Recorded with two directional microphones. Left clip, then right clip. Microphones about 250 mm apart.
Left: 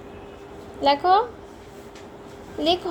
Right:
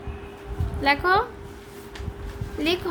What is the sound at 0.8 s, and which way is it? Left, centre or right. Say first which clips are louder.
Speech: left 2 dB; right.